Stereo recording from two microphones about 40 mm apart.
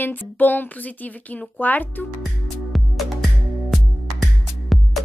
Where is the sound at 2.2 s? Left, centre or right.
Centre.